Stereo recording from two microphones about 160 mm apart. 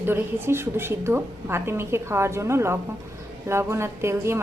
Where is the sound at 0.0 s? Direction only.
15° right (ahead or behind).